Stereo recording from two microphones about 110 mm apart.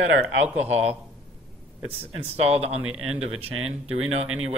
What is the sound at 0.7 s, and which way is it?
Speech, 75° right (ahead or behind).